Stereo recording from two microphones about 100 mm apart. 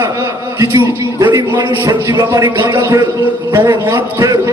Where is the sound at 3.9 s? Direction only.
35° right (ahead or behind).